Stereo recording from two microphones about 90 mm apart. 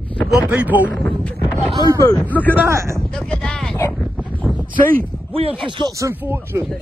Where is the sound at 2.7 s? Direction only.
30° right (ahead or behind).